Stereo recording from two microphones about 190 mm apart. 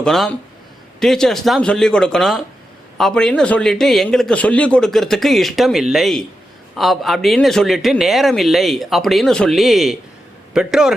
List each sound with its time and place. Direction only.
0.0 s a man's voice: 5° left (ahead or behind)